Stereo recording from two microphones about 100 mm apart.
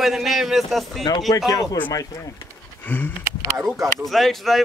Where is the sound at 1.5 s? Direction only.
35° left (ahead or behind).